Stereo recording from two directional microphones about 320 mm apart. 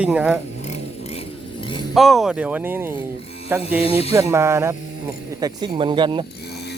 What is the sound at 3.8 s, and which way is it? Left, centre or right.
Speech, centre.